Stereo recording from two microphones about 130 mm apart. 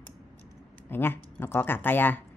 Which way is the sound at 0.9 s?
15° left (ahead or behind).